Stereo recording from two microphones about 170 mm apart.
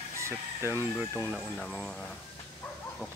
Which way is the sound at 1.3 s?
5° left (ahead or behind).